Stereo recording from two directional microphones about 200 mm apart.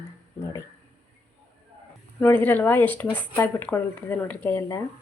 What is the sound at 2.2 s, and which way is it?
Speech, 10° left (ahead or behind).